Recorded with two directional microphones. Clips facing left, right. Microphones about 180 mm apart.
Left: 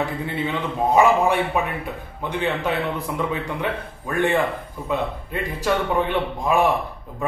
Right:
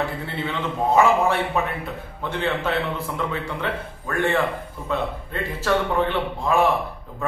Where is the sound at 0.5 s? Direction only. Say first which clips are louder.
Even; 15° left (ahead or behind).